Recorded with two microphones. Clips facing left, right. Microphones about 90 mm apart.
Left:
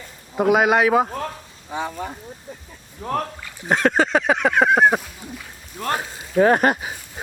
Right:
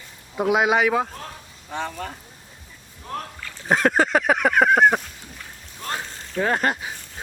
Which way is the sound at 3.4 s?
15° left (ahead or behind).